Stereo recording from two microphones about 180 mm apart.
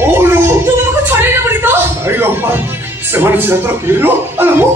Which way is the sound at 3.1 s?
10° right (ahead or behind).